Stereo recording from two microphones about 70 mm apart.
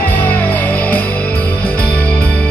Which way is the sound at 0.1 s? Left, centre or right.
Left.